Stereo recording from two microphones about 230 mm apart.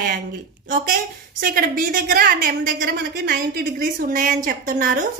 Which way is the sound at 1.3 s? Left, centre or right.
Right.